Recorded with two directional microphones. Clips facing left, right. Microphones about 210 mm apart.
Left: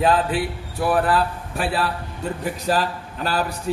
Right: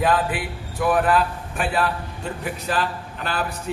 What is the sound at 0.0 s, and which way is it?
A man's voice, 30° left (ahead or behind).